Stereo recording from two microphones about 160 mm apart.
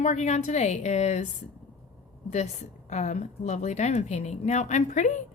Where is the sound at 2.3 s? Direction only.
45° left (ahead or behind).